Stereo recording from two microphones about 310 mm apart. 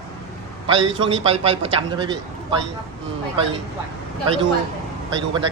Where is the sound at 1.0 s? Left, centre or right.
Centre.